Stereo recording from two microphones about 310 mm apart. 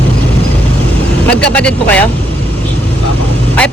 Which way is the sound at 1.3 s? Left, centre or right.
Centre.